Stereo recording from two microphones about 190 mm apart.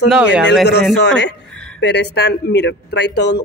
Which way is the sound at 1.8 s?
65° left (ahead or behind).